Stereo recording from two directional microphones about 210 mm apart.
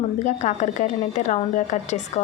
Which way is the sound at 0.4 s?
35° left (ahead or behind).